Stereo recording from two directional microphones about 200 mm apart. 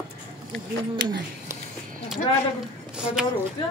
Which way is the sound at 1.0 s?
60° right (ahead or behind).